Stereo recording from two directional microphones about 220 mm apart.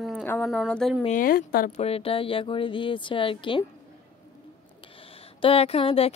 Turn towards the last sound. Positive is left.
turn(degrees=25)  # may be behind; listen again after turning